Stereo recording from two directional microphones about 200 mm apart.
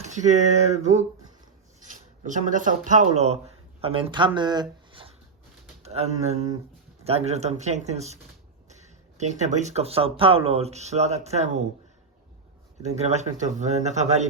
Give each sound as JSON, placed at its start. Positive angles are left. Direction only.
{"t": 0.0, "sound": "speech", "side_deg": -35}
{"t": 4.9, "sound": "a sound", "side_deg": -25}
{"t": 5.8, "sound": "speech", "side_deg": -30}
{"t": 13.0, "sound": "speech", "side_deg": -35}